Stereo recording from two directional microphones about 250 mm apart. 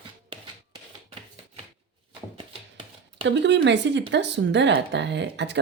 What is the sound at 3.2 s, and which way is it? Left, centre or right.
Speech, right.